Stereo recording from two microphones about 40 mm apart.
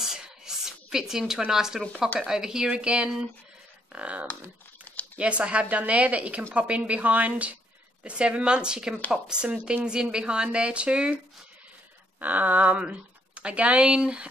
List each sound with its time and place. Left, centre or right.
0.0 s a sound: centre
1.5 s speech: centre
2.7 s speech: right
12.2 s speech: right
12.7 s speech: right